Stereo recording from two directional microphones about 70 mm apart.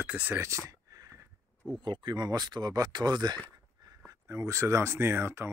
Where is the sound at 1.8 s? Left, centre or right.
Right.